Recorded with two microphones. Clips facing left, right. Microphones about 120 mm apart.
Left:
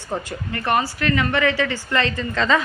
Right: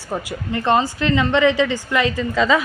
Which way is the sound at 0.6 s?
20° right (ahead or behind).